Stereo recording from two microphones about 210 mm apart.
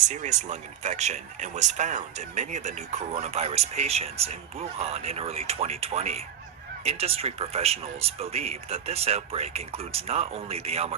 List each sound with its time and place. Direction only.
0.1 s speech: 35° right (ahead or behind)